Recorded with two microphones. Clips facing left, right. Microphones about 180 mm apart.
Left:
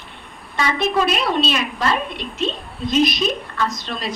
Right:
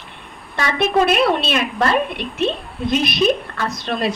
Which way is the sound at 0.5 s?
60° right (ahead or behind).